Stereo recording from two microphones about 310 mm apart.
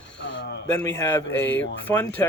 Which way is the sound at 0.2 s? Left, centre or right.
Left.